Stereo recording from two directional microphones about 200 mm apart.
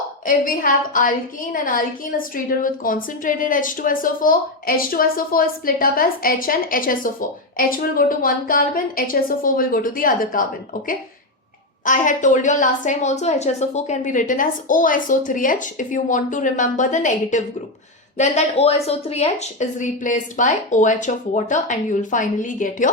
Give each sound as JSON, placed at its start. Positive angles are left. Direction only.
{"t": 0.3, "sound": "a woman's voice", "side_deg": 45}
{"t": 11.9, "sound": "a woman's voice", "side_deg": 40}